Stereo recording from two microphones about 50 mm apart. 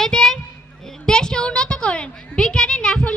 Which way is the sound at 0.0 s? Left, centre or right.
Centre.